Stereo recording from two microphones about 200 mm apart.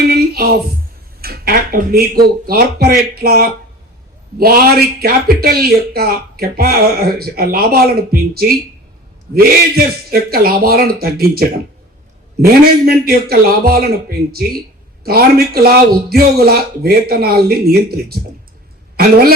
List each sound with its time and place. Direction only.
0.1 s a sound: 50° right (ahead or behind)
1.2 s speech: 50° right (ahead or behind)
15.0 s speech: 50° right (ahead or behind)